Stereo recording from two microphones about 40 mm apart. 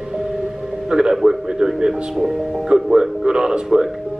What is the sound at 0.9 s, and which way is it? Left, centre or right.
Music, centre.